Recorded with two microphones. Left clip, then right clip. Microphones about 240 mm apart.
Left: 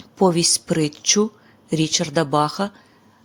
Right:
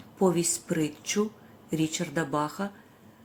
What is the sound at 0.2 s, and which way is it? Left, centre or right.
Speech, left.